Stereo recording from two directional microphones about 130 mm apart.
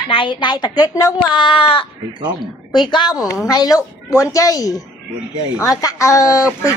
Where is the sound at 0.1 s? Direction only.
40° left (ahead or behind).